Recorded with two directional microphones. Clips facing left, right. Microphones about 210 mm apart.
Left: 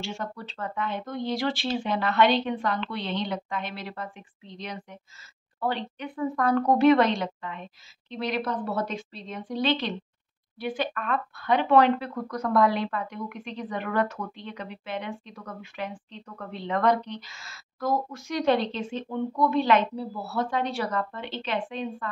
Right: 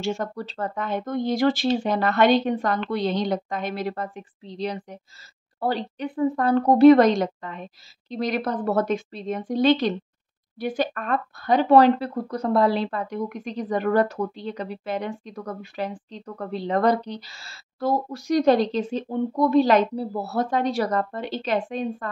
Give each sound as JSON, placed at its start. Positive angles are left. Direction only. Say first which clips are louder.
{"t": 0.0, "sound": "speech", "louder": "right 7 dB", "side_deg": -45}